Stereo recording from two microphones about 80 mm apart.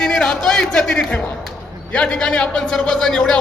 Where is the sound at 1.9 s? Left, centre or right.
Centre.